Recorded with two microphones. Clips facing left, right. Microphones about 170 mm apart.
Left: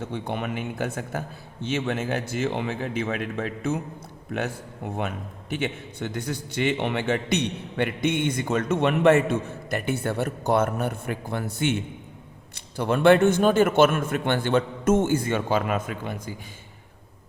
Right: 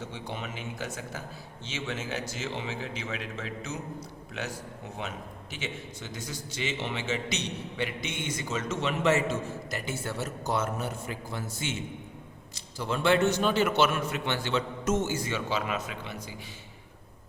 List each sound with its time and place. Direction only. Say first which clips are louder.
0.0 s a man's voice: left 8 dB; 55° left (ahead or behind)